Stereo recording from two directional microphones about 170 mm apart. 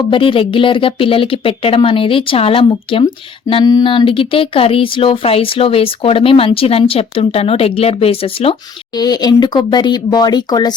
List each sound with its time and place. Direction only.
0.1 s speech: 30° left (ahead or behind)